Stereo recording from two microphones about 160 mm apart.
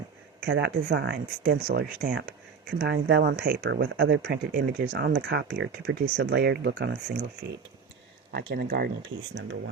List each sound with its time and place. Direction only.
0.4 s speech: 90° right
8.3 s speech: 80° right